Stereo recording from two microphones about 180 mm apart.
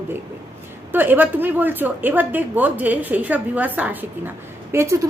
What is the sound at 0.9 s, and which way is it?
A woman's voice, 10° right (ahead or behind).